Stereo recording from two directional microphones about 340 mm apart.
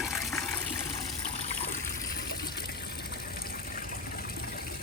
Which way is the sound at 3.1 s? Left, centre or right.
Left.